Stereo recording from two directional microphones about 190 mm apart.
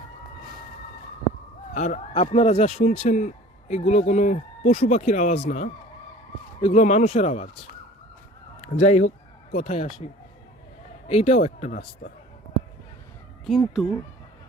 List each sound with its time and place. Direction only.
1.7 s speech: 40° left (ahead or behind)
8.6 s speech: 35° left (ahead or behind)
11.1 s speech: 35° left (ahead or behind)
13.4 s speech: centre (ahead or behind)